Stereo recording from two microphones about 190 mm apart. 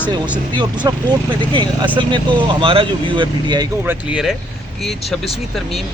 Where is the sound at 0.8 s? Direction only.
15° right (ahead or behind).